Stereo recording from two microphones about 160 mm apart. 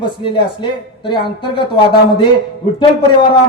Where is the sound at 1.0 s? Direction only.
30° left (ahead or behind).